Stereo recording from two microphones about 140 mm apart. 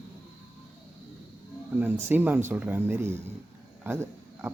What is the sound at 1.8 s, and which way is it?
Speech, 15° right (ahead or behind).